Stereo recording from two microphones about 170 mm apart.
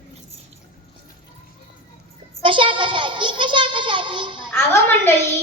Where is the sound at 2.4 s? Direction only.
30° right (ahead or behind).